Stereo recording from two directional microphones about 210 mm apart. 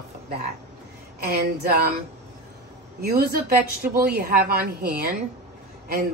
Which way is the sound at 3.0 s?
50° right (ahead or behind).